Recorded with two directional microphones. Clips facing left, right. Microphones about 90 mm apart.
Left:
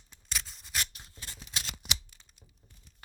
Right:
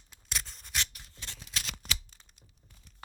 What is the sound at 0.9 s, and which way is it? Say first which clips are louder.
Scissors: even; 20° left (ahead or behind).